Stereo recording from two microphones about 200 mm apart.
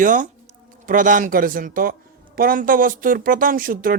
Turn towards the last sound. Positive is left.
turn(degrees=-45)  # may be behind; listen again after turning